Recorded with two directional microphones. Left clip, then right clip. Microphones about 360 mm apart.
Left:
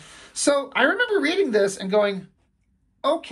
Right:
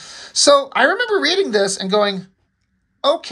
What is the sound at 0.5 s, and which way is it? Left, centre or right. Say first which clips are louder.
A woman's voice: right 6 dB; centre.